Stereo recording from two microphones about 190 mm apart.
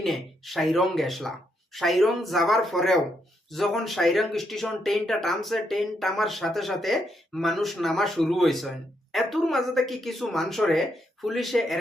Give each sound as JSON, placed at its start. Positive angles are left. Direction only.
{"t": 0.0, "sound": "speech", "side_deg": 0}